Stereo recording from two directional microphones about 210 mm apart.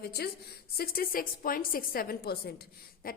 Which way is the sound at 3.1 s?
45° left (ahead or behind).